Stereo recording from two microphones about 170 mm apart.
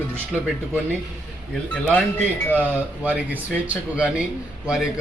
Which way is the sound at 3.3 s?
10° right (ahead or behind).